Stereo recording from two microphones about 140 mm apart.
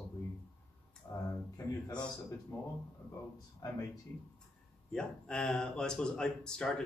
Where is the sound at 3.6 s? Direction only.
25° left (ahead or behind).